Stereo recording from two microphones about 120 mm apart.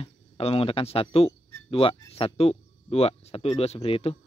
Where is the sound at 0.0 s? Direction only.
55° left (ahead or behind).